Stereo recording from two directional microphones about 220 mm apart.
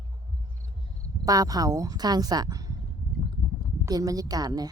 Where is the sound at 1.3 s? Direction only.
15° right (ahead or behind).